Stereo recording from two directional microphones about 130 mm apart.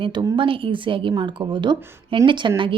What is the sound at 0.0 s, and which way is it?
A woman's voice, 40° right (ahead or behind).